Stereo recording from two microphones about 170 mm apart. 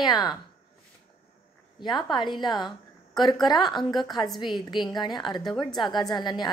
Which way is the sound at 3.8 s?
Centre (ahead or behind).